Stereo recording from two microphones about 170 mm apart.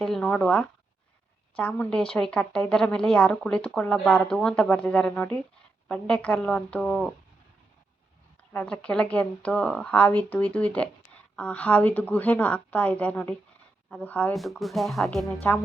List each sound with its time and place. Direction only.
0.0 s a woman's voice: centre (ahead or behind)
8.5 s a woman's voice: 5° left (ahead or behind)